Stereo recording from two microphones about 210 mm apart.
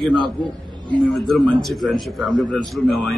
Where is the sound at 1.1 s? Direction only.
Centre (ahead or behind).